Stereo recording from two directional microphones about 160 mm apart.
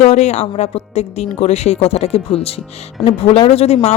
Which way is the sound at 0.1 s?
45° left (ahead or behind).